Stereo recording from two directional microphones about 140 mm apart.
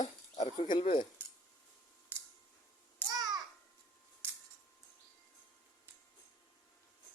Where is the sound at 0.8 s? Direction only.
40° left (ahead or behind).